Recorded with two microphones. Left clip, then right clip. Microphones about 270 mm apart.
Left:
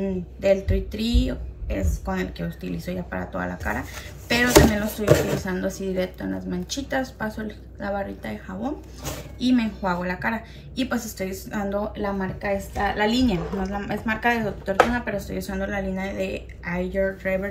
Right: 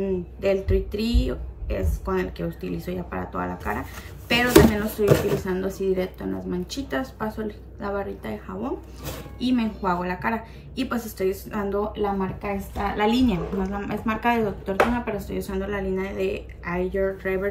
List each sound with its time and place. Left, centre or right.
0.0 s a woman's voice: centre